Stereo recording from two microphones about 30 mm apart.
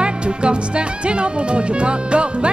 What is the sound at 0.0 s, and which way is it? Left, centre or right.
Speech, right.